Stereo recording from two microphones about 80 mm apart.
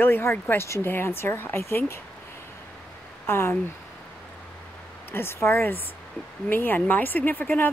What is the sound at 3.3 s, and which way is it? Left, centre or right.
Speech, left.